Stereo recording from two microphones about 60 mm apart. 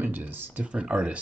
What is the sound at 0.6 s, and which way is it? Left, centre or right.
Speech, centre.